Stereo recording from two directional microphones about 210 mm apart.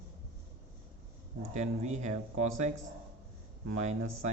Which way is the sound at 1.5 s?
35° right (ahead or behind).